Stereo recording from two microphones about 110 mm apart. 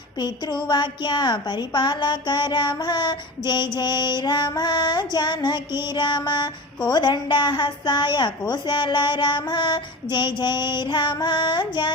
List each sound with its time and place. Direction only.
0.2 s a woman's voice: 40° left (ahead or behind)